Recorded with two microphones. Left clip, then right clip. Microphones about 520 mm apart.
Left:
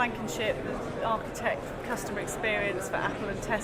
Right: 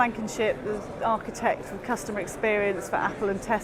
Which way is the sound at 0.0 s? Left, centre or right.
Right.